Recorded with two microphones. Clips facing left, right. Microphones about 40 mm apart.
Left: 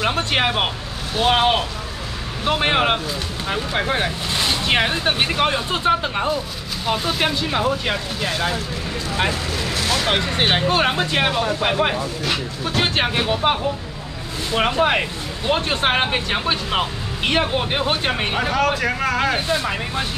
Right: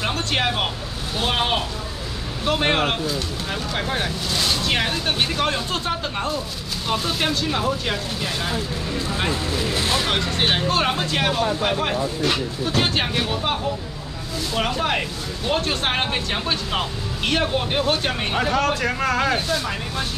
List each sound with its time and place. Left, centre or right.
0.0 s speech: centre
6.9 s speech: centre
9.8 s vehicle: centre
10.0 s speech: centre
12.2 s speech: centre
12.8 s speech: left; by 19.3 s centre
19.3 s speech: left